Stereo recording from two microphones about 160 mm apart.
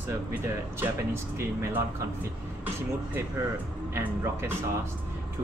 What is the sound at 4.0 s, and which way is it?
Speech, 15° right (ahead or behind).